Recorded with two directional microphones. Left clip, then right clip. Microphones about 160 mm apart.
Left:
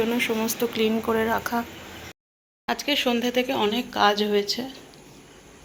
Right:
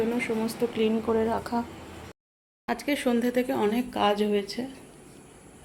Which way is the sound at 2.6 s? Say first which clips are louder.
Left 4 dB; 20° right (ahead or behind).